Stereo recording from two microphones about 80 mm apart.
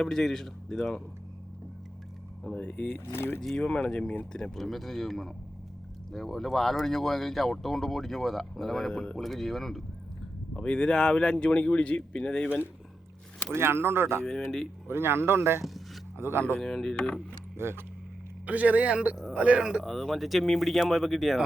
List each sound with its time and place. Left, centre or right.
0.0 s speech: centre
2.4 s speech: centre; by 3.4 s left
3.4 s speech: centre
13.5 s speech: right
14.3 s speech: centre
14.8 s speech: right
16.6 s speech: centre
17.6 s speech: right
18.4 s a man's voice: centre
19.8 s speech: centre